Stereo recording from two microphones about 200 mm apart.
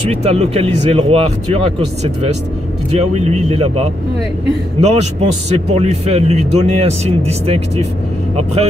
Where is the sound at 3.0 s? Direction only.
35° right (ahead or behind).